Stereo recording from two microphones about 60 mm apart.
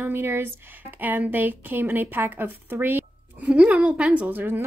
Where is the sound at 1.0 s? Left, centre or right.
Right.